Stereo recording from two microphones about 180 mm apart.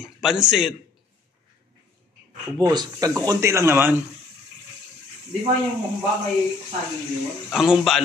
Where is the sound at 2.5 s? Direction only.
20° right (ahead or behind).